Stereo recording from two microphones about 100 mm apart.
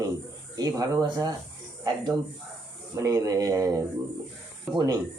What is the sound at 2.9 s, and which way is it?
Speech, 35° right (ahead or behind).